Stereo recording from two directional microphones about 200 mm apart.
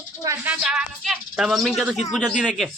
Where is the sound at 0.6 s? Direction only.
Centre (ahead or behind).